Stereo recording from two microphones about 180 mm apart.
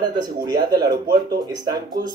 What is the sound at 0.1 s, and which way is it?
Speech, 20° right (ahead or behind).